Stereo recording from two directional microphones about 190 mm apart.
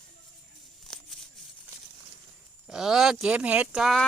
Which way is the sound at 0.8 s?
Centre (ahead or behind).